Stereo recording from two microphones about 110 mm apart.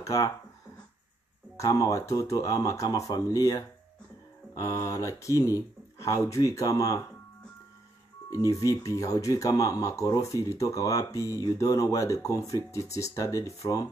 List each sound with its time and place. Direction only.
0.0 s speech: 30° left (ahead or behind)
1.6 s speech: 30° left (ahead or behind)
8.3 s speech: 30° left (ahead or behind)